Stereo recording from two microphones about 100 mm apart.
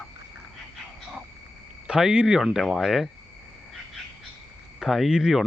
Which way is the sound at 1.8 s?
10° right (ahead or behind).